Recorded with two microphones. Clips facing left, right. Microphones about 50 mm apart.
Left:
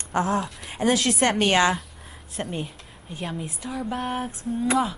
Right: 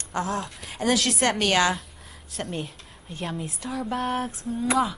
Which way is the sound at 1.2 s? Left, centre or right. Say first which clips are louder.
Left 3 dB; left.